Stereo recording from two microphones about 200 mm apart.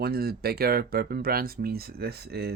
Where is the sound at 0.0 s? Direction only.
50° right (ahead or behind).